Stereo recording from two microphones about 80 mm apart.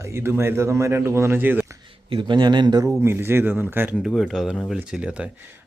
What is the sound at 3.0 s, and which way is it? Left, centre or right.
Speech, right.